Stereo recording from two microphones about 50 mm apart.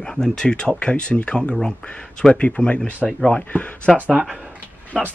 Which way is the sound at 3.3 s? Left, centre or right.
Left.